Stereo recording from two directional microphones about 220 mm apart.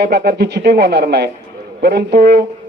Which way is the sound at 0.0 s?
45° right (ahead or behind).